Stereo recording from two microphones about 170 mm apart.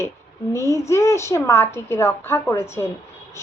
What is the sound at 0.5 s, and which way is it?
A woman's voice, 15° left (ahead or behind).